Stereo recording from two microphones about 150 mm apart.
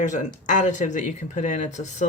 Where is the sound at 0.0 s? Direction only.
55° left (ahead or behind).